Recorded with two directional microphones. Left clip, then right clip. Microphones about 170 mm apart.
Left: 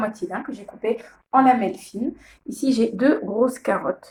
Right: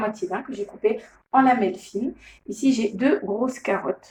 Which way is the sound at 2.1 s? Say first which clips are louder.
Right 1 dB; 40° left (ahead or behind).